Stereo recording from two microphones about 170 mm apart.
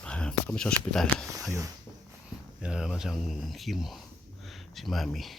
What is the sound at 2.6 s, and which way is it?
Speech, 5° right (ahead or behind).